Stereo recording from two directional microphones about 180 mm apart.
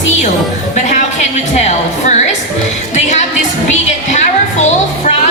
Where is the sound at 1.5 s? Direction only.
40° left (ahead or behind).